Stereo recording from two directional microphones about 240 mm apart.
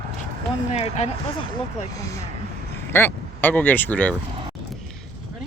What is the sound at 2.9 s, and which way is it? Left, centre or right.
Speech, centre.